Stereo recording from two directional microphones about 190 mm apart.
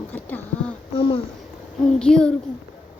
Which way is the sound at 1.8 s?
5° left (ahead or behind).